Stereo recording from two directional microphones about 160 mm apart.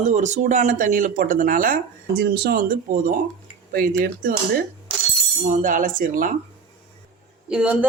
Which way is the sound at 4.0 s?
65° right (ahead or behind).